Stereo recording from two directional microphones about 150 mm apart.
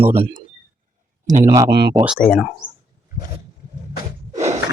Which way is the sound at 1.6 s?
90° right.